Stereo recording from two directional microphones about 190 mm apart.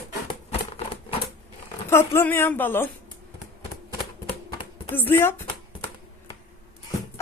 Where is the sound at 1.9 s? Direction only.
10° left (ahead or behind).